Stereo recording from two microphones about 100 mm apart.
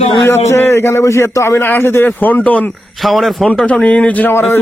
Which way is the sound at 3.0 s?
Centre (ahead or behind).